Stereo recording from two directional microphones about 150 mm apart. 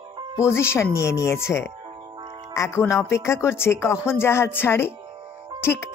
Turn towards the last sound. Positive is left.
turn(degrees=15)  # may be behind; listen again after turning